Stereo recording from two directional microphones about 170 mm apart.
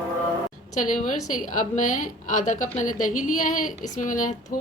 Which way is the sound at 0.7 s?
50° left (ahead or behind).